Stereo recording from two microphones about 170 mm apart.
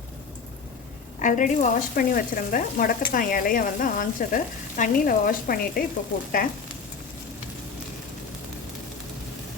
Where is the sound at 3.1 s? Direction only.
55° left (ahead or behind).